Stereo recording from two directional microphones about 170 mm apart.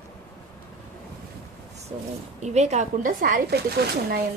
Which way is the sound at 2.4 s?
40° right (ahead or behind).